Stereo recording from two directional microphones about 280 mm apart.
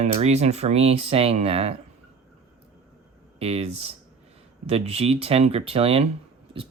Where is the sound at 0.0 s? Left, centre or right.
Right.